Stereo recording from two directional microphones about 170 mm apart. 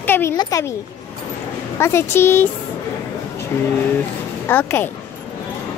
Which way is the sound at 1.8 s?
15° left (ahead or behind).